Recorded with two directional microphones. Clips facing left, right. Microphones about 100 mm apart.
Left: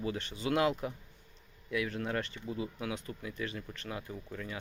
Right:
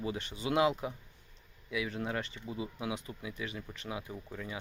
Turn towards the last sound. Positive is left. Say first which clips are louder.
# even
turn(degrees=-15)  # may be behind; listen again after turning